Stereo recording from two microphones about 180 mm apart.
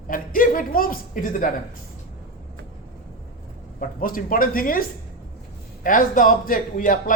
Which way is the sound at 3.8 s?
50° left (ahead or behind).